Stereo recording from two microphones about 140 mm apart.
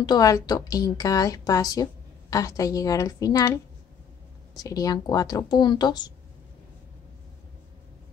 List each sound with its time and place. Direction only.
0.0 s a woman's voice: 25° left (ahead or behind)
4.6 s a woman's voice: 25° left (ahead or behind)